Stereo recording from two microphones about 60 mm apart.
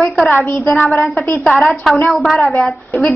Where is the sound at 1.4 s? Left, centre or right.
Centre.